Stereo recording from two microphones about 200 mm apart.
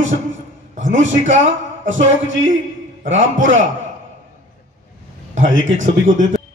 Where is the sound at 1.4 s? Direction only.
70° right (ahead or behind).